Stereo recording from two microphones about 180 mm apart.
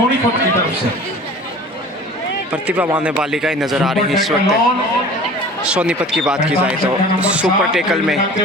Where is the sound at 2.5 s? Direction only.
10° right (ahead or behind).